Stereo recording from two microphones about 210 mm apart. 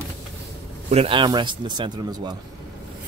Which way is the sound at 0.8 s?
25° right (ahead or behind).